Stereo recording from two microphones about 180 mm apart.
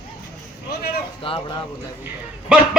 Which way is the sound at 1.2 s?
30° left (ahead or behind).